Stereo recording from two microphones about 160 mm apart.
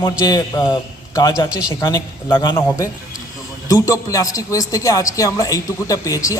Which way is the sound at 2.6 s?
15° left (ahead or behind).